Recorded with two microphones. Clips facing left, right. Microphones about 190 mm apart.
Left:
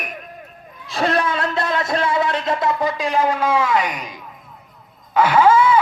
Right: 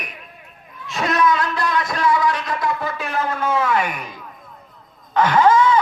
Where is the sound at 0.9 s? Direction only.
30° left (ahead or behind).